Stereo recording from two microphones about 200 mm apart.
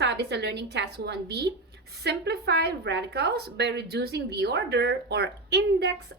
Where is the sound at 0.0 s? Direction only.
55° right (ahead or behind).